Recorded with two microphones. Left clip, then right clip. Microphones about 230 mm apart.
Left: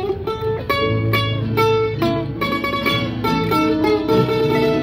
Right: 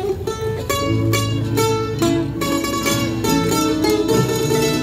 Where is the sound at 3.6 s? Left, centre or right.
Right.